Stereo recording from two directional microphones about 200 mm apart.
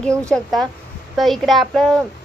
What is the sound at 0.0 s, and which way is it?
A woman's voice, 5° left (ahead or behind).